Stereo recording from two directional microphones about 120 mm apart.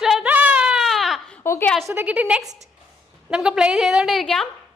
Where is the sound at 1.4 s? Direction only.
20° left (ahead or behind).